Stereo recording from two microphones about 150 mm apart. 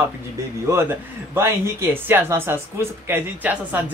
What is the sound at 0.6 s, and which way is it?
Speech, 15° right (ahead or behind).